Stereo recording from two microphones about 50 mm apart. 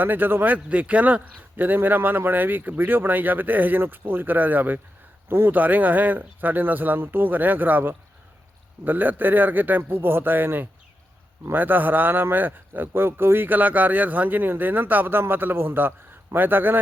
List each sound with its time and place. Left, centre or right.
0.0 s a man's voice: right